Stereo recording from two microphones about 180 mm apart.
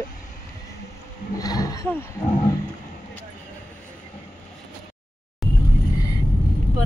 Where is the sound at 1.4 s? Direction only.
20° left (ahead or behind).